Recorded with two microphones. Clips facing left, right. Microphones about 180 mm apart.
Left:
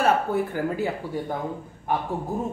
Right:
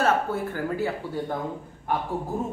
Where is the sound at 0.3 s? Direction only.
15° left (ahead or behind).